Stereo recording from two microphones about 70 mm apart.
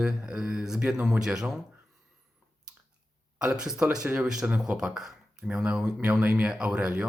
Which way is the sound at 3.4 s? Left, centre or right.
Centre.